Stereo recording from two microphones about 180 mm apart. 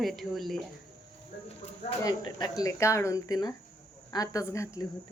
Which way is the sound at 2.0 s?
20° left (ahead or behind).